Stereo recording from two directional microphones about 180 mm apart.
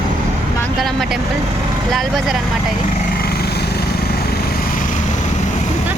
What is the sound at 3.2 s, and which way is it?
Lawn mower, 60° left (ahead or behind).